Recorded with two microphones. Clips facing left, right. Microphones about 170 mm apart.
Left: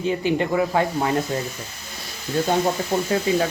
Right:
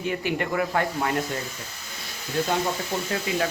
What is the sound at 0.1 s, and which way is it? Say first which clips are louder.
Speech: left 5 dB; 25° left (ahead or behind).